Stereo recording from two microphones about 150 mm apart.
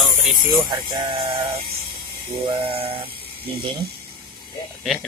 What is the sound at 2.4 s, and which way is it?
Speech, 35° right (ahead or behind).